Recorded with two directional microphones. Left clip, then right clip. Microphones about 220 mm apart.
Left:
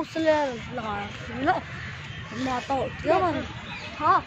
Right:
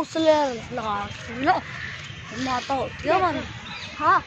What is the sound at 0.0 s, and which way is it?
Speech, 30° right (ahead or behind).